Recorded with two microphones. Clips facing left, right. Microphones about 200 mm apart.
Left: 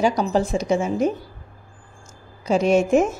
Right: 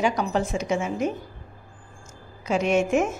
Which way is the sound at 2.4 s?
35° left (ahead or behind).